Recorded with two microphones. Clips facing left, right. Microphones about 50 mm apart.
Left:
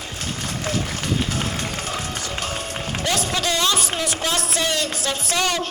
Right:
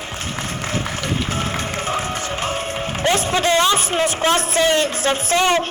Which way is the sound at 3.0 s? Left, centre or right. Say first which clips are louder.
Right 6 dB; right.